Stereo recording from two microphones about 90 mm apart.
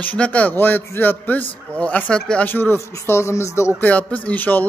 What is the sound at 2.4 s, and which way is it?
A man's voice, 25° left (ahead or behind).